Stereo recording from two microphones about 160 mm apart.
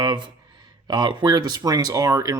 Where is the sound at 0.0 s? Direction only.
25° right (ahead or behind).